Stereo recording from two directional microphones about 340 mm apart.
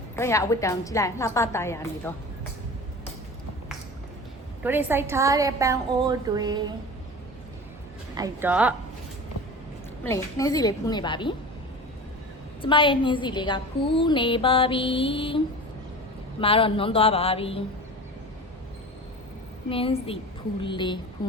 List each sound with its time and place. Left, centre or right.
0.2 s a woman's voice: centre
4.6 s a woman's voice: centre
8.1 s speech: centre
10.0 s a woman's voice: centre
12.6 s a woman's voice: centre
16.4 s a woman's voice: centre
19.7 s a woman's voice: centre
21.2 s speech: left